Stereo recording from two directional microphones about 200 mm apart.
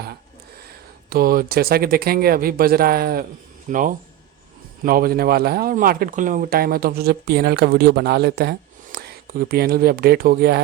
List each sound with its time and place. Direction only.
1.1 s speech: 45° right (ahead or behind)